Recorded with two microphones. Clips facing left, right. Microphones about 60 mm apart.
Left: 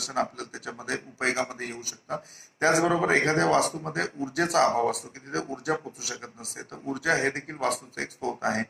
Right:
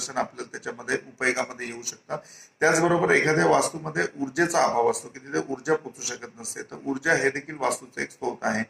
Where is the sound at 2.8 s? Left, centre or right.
Right.